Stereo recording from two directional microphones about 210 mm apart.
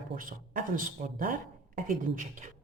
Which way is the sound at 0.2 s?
40° right (ahead or behind).